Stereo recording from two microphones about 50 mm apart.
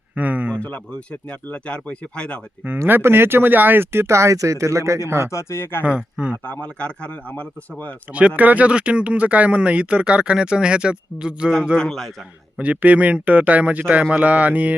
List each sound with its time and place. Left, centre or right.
0.2 s a sound: right
0.5 s speech: left
2.8 s speech: right
4.0 s speech: right
5.0 s speech: right
5.3 s speech: left
5.8 s speech: right
6.3 s speech: left
8.4 s speech: right
11.8 s a man's voice: centre
12.5 s speech: right